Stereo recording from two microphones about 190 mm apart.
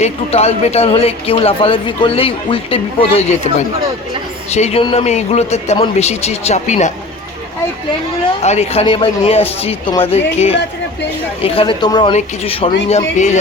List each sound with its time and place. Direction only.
0.0 s speech: 35° left (ahead or behind)
4.5 s speech: 35° left (ahead or behind)
8.4 s speech: 35° left (ahead or behind)